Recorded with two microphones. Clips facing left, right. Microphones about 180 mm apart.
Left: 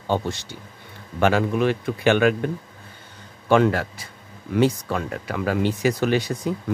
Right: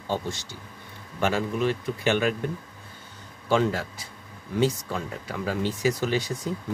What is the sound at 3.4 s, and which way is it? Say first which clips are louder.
Speech: left 5 dB; 65° left (ahead or behind).